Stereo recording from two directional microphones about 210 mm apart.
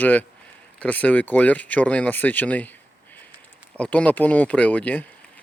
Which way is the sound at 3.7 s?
5° left (ahead or behind).